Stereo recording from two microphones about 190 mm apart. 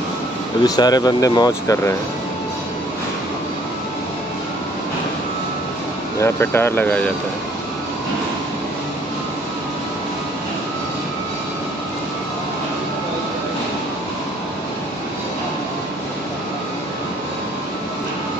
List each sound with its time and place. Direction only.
0.7 s speech: 20° left (ahead or behind)
6.1 s speech: 15° left (ahead or behind)